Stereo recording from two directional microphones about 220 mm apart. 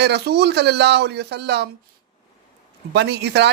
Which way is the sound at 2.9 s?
50° right (ahead or behind).